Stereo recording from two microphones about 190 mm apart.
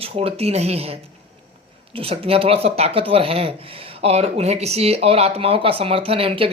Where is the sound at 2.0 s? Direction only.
30° right (ahead or behind).